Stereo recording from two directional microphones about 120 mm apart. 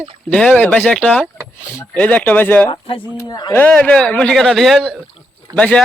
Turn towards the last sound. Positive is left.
turn(degrees=10)  # may be behind; listen again after turning